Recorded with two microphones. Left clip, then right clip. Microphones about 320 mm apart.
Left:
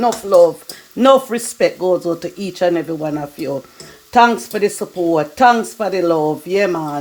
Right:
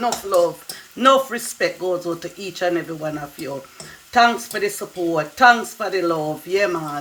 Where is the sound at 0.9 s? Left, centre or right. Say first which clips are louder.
Left 4 dB; left.